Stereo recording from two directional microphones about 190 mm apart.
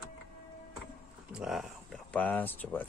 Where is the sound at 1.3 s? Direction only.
Centre (ahead or behind).